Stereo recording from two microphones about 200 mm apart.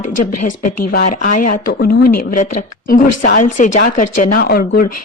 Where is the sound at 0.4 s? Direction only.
40° left (ahead or behind).